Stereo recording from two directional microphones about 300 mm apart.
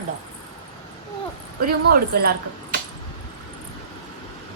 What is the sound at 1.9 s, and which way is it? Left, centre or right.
Speech, right.